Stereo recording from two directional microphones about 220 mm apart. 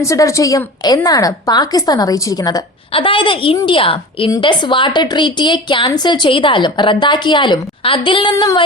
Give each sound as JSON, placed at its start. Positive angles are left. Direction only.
{"t": 0.0, "sound": "a woman's voice", "side_deg": 15}